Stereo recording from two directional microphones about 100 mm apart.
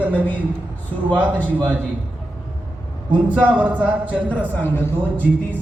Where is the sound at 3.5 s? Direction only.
15° right (ahead or behind).